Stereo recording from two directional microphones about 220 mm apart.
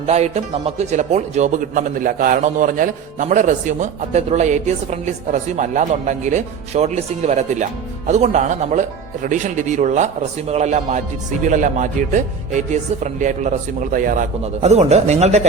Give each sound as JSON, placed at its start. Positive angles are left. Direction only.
{"t": 0.0, "sound": "a man's voice", "side_deg": -30}